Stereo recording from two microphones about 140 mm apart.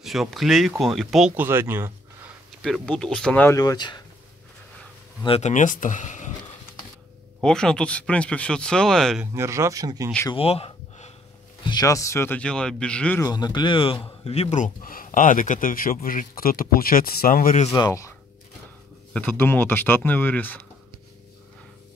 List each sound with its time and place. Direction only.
0.0 s speech: centre (ahead or behind)
1.3 s speech: 15° right (ahead or behind)
2.6 s speech: 5° left (ahead or behind)
3.5 s speech: 30° left (ahead or behind)
5.4 s speech: 65° left (ahead or behind)
7.4 s speech: 5° left (ahead or behind)
9.2 s speech: 20° right (ahead or behind)
10.3 s a sound: 45° left (ahead or behind)
11.6 s speech: 25° left (ahead or behind); by 13.2 s 10° left (ahead or behind)
13.2 s speech: 30° left (ahead or behind); by 17.6 s 80° left
17.6 s speech: 25° left (ahead or behind)
19.1 s speech: 15° left (ahead or behind)